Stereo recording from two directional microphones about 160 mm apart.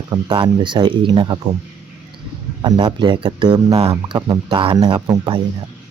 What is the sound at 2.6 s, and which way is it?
Speech, 25° right (ahead or behind).